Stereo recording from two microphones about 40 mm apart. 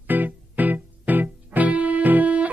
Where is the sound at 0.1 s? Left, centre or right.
Right.